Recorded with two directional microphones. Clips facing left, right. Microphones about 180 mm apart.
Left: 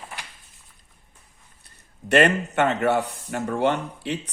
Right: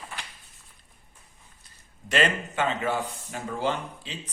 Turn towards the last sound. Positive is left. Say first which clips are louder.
# left 10 dB
turn(degrees=70)  # may be behind; listen again after turning